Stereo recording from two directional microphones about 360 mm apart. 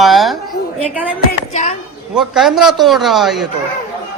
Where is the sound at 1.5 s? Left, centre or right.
Centre.